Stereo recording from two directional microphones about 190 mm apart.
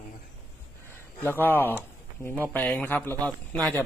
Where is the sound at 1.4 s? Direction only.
10° left (ahead or behind).